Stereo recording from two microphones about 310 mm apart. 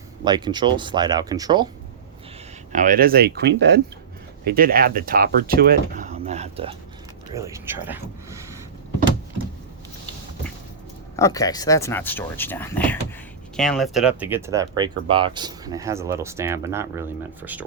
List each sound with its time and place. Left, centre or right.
0.3 s speech: centre
2.7 s speech: right; by 8.4 s centre
11.2 s speech: centre